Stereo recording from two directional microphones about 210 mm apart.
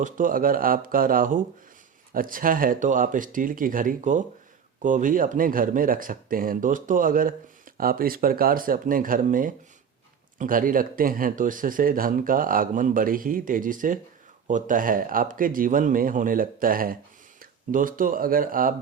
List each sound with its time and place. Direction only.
0.0 s speech: 40° right (ahead or behind)